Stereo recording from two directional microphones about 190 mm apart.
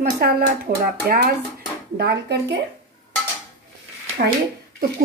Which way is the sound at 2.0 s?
60° right (ahead or behind).